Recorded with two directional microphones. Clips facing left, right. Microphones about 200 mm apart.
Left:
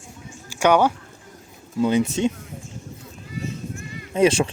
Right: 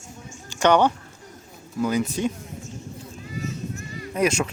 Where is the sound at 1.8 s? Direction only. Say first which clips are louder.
Left 4 dB; 25° left (ahead or behind).